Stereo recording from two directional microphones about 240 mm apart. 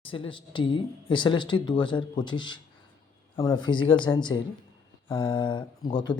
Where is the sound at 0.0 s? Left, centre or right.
Left.